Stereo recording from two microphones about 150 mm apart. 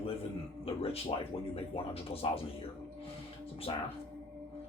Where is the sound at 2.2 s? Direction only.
40° left (ahead or behind).